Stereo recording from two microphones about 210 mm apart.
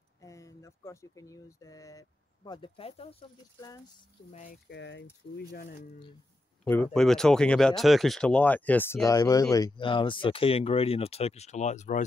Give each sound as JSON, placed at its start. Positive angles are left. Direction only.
{"t": 0.2, "sound": "speech", "side_deg": 15}
{"t": 4.3, "sound": "speech", "side_deg": 35}
{"t": 4.6, "sound": "speech", "side_deg": 55}
{"t": 5.5, "sound": "speech", "side_deg": 45}
{"t": 6.6, "sound": "speech", "side_deg": 5}